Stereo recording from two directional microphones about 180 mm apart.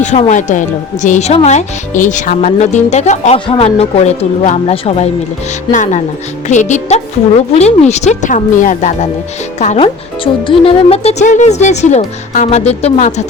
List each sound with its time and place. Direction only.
0.0 s speech: 40° left (ahead or behind)
5.7 s speech: 45° left (ahead or behind)